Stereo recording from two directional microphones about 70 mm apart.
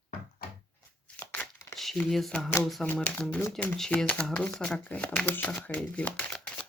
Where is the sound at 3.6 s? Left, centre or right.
Centre.